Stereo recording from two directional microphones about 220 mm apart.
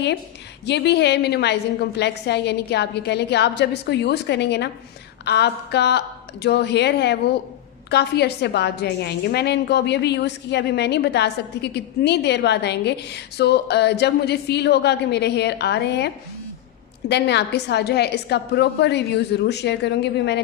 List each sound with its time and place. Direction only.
0.7 s a woman's voice: 50° left (ahead or behind)
17.1 s a woman's voice: 50° left (ahead or behind)